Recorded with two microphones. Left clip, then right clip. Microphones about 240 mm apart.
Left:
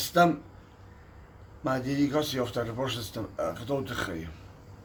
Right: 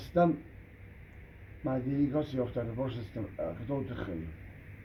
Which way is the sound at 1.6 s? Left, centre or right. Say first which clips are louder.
Left 4 dB; left.